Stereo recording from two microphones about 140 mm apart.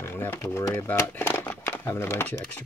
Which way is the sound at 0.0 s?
15° left (ahead or behind).